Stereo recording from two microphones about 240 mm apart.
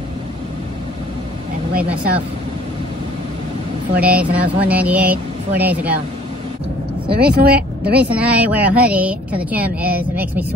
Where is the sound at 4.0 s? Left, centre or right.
Centre.